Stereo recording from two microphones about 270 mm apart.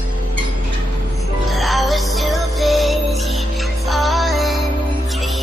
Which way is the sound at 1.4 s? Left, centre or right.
Centre.